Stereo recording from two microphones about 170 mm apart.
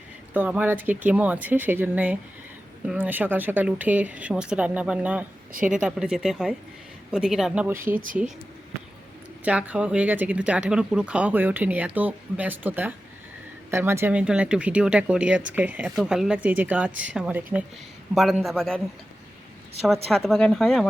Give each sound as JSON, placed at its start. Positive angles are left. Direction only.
{"t": 0.3, "sound": "speech", "side_deg": -10}
{"t": 7.9, "sound": "speech", "side_deg": -50}
{"t": 9.4, "sound": "speech", "side_deg": -5}
{"t": 20.1, "sound": "speech", "side_deg": 0}